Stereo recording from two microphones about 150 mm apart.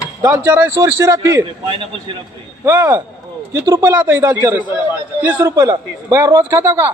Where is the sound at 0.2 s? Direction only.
15° right (ahead or behind).